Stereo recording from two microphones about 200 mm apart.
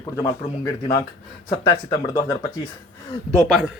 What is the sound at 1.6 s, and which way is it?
Speech, 25° left (ahead or behind).